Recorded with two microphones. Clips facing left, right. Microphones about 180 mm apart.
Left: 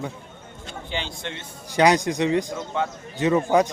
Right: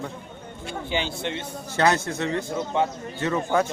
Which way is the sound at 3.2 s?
15° left (ahead or behind).